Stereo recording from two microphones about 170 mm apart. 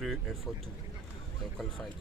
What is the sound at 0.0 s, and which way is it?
Speech, centre (ahead or behind).